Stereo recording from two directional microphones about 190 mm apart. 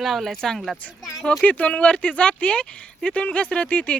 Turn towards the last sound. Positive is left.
turn(degrees=5)  # may be behind; listen again after turning